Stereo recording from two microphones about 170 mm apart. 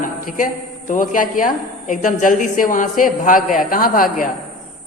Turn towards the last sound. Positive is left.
turn(degrees=55)  # may be behind; listen again after turning